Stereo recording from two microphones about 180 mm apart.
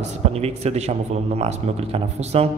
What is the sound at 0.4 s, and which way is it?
A man's voice, 35° right (ahead or behind).